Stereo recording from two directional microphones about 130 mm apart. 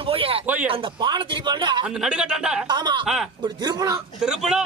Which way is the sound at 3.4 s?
30° right (ahead or behind).